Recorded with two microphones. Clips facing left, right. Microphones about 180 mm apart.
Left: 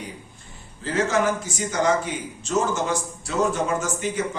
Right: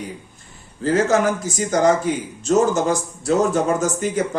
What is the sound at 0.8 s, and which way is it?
Speech, 45° right (ahead or behind).